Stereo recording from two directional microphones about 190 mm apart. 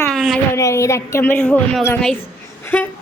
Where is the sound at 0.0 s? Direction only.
Centre (ahead or behind).